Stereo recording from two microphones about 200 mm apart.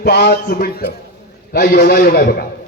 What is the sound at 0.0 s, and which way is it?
Speech, 55° left (ahead or behind).